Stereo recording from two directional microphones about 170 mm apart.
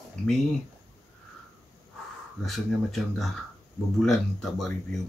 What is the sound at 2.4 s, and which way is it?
Speech, centre (ahead or behind).